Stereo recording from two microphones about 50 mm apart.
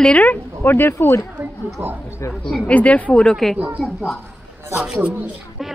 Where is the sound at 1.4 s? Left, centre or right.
Right.